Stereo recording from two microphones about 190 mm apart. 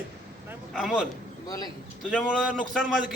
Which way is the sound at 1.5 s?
20° left (ahead or behind).